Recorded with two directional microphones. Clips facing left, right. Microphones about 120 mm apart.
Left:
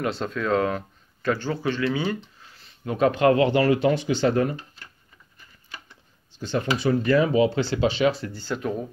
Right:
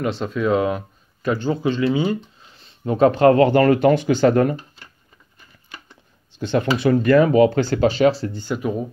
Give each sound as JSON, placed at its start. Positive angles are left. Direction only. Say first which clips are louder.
{"t": 0.0, "sound": "speech", "louder": "right 5 dB", "side_deg": -5}
{"t": 2.4, "sound": "a sound", "louder": "right 7 dB", "side_deg": -20}
{"t": 2.9, "sound": "speech", "louder": "right 5 dB", "side_deg": -35}
{"t": 6.3, "sound": "speech", "louder": "right 5 dB", "side_deg": -60}
{"t": 8.3, "sound": "speech", "louder": "right 4 dB", "side_deg": -15}